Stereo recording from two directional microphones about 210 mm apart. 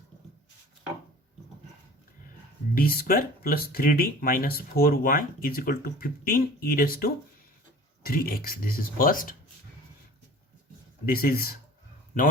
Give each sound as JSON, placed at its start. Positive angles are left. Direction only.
{"t": 2.7, "sound": "speech", "side_deg": 45}
{"t": 11.0, "sound": "speech", "side_deg": 45}